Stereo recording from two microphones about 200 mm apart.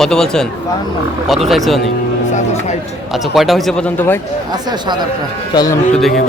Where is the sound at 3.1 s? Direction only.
Centre (ahead or behind).